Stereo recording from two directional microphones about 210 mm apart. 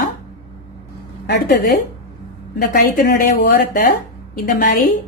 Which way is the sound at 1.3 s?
50° left (ahead or behind).